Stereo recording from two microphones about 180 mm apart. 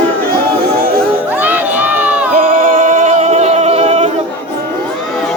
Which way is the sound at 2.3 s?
50° right (ahead or behind).